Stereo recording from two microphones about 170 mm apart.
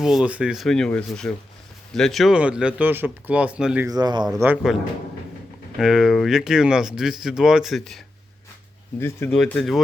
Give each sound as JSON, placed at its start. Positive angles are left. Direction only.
{"t": 0.0, "sound": "speech", "side_deg": -5}
{"t": 3.8, "sound": "speech", "side_deg": -25}
{"t": 4.4, "sound": "speech", "side_deg": -10}
{"t": 5.8, "sound": "speech", "side_deg": 0}
{"t": 9.0, "sound": "speech", "side_deg": 15}